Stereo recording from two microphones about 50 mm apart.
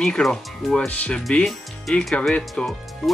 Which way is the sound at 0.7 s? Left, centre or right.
Left.